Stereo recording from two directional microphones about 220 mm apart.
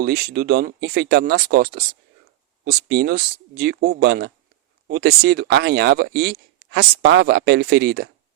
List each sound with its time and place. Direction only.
0.0 s speech: 45° right (ahead or behind)